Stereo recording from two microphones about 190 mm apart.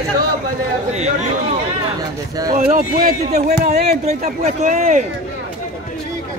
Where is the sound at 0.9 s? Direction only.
35° right (ahead or behind).